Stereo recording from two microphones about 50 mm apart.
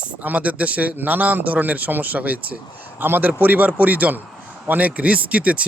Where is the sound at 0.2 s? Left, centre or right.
Right.